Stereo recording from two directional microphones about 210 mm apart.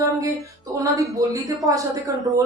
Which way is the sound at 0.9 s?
15° right (ahead or behind).